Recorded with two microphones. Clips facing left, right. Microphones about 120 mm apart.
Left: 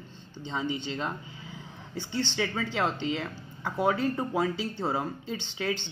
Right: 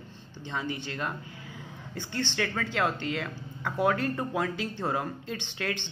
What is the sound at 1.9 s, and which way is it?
Speech, 15° left (ahead or behind).